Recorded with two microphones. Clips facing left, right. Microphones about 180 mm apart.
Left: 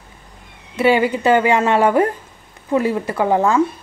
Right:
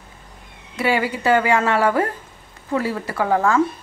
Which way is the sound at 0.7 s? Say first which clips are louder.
Left 6 dB; 20° left (ahead or behind).